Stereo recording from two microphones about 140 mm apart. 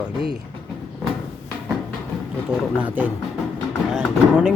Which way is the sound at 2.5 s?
10° right (ahead or behind).